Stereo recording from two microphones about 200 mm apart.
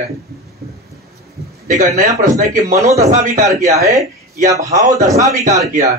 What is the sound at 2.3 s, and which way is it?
Speech, 40° right (ahead or behind).